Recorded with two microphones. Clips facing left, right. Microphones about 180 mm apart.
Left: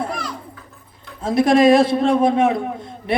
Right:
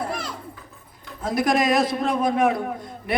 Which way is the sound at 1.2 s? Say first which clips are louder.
Left 7 dB; 25° left (ahead or behind).